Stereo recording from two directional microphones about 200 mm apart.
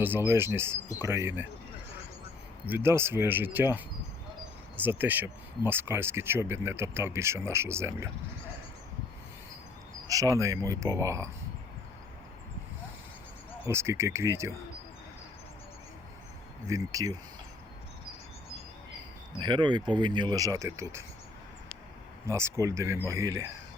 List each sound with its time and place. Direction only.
0.0 s speech: 10° right (ahead or behind)
2.6 s speech: 10° right (ahead or behind)
10.1 s speech: 15° right (ahead or behind)
13.7 s speech: 15° right (ahead or behind)
16.6 s speech: 15° right (ahead or behind)
19.4 s speech: 20° right (ahead or behind)
22.3 s speech: 15° right (ahead or behind)